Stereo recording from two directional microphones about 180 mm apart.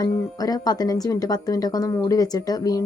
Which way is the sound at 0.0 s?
20° left (ahead or behind).